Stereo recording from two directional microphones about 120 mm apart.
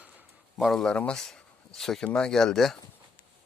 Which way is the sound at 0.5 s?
Centre (ahead or behind).